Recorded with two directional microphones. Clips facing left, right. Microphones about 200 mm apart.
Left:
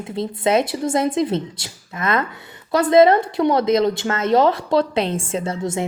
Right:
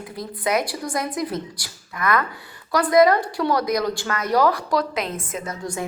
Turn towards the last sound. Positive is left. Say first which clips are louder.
# left 6 dB
turn(degrees=25)  # may be behind; listen again after turning